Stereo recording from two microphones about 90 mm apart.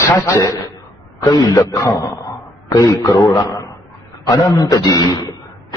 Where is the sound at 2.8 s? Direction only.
40° left (ahead or behind).